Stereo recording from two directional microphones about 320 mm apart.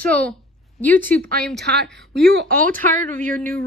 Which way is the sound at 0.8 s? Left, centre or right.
Centre.